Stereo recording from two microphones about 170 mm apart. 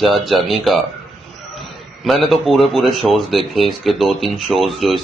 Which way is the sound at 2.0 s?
Centre (ahead or behind).